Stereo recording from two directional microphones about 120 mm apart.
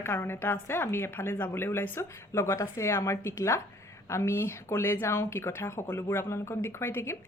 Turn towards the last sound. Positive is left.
turn(degrees=20)  # may be behind; listen again after turning